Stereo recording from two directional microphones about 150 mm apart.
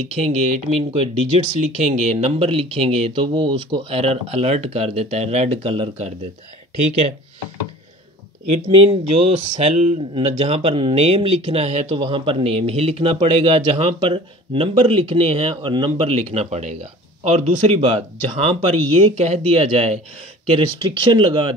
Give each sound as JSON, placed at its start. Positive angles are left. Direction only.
{"t": 0.1, "sound": "speech", "side_deg": -50}
{"t": 8.7, "sound": "speech", "side_deg": -40}
{"t": 11.9, "sound": "speech", "side_deg": -35}